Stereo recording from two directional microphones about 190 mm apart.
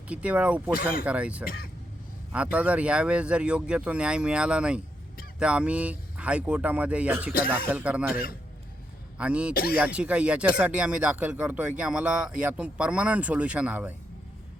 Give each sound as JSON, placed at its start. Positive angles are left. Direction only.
{"t": 0.1, "sound": "speech", "side_deg": -5}